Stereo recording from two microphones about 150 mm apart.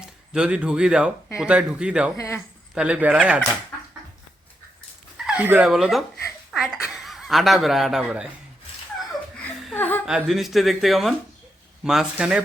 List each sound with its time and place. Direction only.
0.0 s a man's voice: 5° right (ahead or behind)
2.1 s speech: 20° left (ahead or behind)
2.7 s a man's voice: 10° right (ahead or behind)
5.1 s speech: 5° right (ahead or behind)
9.4 s a sound: 10° left (ahead or behind)
10.1 s speech: 5° right (ahead or behind)